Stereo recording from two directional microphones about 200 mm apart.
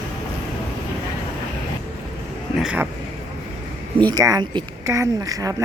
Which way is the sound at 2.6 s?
5° right (ahead or behind).